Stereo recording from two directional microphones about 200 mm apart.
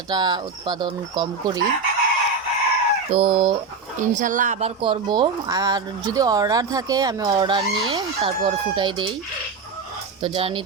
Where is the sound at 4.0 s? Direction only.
40° right (ahead or behind); by 9.1 s 25° right (ahead or behind).